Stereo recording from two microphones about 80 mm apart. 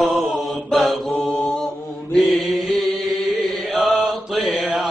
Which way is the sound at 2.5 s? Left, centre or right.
Centre.